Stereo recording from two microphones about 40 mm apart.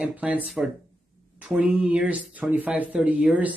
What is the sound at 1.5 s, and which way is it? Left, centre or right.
Speech, right.